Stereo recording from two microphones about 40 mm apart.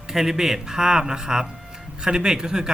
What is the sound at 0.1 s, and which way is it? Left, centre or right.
A man's voice, centre.